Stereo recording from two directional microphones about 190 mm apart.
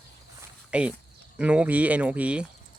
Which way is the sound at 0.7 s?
5° right (ahead or behind).